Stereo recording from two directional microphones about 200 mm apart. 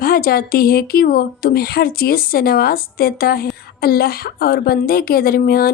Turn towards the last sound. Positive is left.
turn(degrees=50)  # may be behind; listen again after turning